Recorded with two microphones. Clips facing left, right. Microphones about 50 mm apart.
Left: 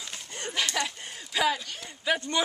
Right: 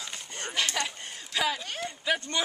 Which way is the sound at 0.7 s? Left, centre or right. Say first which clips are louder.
Left 1 dB; centre.